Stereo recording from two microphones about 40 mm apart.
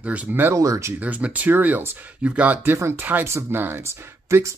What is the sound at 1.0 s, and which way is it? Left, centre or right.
Speech, right.